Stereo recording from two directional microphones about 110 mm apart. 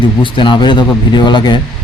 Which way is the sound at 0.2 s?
50° left (ahead or behind).